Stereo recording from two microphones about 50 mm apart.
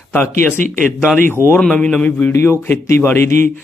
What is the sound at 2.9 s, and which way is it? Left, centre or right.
Speech, left.